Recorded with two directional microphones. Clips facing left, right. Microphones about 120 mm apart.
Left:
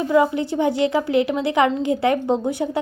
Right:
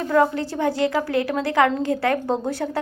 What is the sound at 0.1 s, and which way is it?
A woman's voice, 15° left (ahead or behind).